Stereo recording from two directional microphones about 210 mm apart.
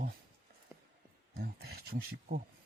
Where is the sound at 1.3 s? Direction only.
50° right (ahead or behind).